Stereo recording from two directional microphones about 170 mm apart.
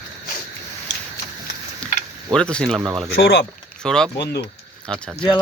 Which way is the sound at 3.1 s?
85° left.